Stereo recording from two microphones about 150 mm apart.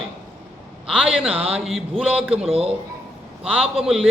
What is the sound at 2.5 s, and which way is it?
Speech, 40° right (ahead or behind).